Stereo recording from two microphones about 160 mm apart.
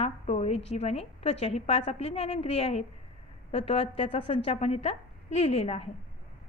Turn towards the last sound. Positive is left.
turn(degrees=40)  # may be behind; listen again after turning